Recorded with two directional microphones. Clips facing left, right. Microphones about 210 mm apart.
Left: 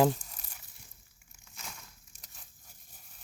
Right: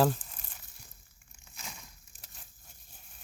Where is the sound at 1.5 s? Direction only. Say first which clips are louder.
Right 1 dB; 5° right (ahead or behind).